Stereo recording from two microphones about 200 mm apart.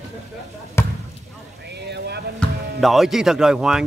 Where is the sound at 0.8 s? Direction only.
15° left (ahead or behind).